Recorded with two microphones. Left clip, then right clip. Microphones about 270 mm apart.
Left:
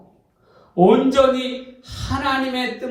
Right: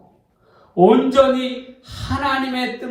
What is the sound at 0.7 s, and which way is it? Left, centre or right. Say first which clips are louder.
Speech: right 2 dB; right.